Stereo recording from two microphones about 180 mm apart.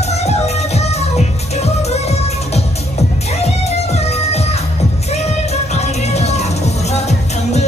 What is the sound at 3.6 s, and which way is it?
Music, 35° left (ahead or behind).